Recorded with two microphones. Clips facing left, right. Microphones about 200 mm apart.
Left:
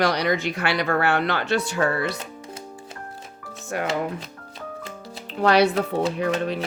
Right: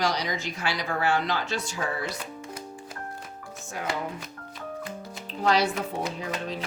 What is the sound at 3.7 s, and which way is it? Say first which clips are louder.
Speech: left 9 dB; 65° left (ahead or behind).